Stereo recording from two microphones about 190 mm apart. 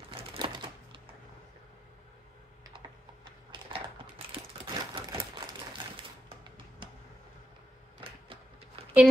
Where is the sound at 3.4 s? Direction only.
25° right (ahead or behind).